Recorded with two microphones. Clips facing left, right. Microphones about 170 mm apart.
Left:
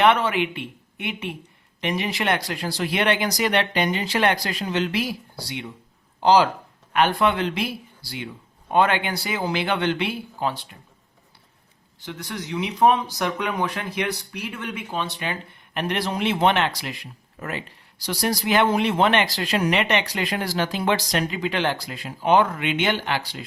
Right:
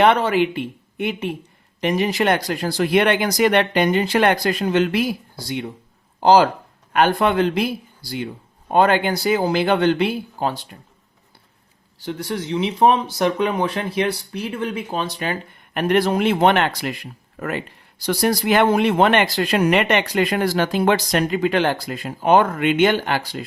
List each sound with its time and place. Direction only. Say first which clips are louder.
0.0 s speech: right 3 dB; 40° right (ahead or behind)
12.0 s speech: right 7 dB; 30° right (ahead or behind); by 23.5 s 45° right (ahead or behind)